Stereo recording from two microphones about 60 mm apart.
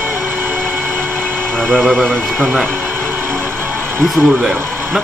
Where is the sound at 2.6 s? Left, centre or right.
Right.